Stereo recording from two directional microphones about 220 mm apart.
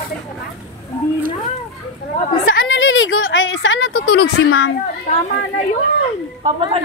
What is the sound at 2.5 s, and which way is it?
A woman's voice, 60° left (ahead or behind).